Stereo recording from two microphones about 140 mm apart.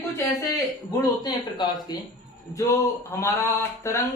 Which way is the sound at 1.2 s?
30° left (ahead or behind).